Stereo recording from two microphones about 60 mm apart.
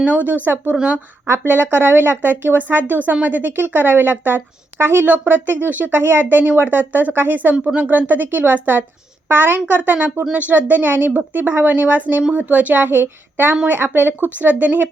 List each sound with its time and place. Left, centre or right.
0.0 s a woman's voice: right
0.7 s a woman's voice: right
1.3 s a woman's voice: right